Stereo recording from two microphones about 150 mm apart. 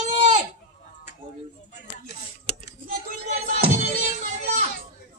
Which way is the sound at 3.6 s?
50° right (ahead or behind).